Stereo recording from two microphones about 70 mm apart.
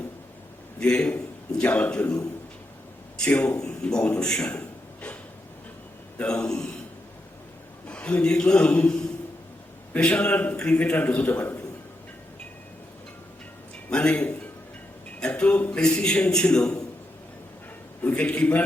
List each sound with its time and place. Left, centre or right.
0.8 s a man's voice: centre
3.2 s a man's voice: centre
6.1 s a man's voice: centre
7.9 s a man's voice: centre
13.9 s a man's voice: centre
18.0 s a man's voice: centre